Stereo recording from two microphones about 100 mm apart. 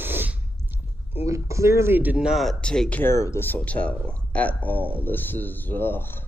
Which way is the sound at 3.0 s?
30° left (ahead or behind).